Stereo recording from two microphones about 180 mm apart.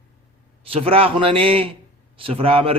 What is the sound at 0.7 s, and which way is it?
A man's voice, 30° right (ahead or behind).